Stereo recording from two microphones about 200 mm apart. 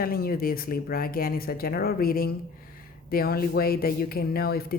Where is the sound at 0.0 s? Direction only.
50° left (ahead or behind).